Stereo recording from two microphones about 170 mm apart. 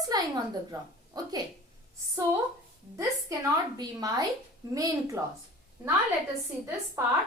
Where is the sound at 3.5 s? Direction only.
20° right (ahead or behind).